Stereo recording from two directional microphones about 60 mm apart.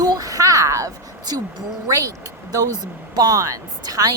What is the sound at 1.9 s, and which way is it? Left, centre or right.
Speech, right.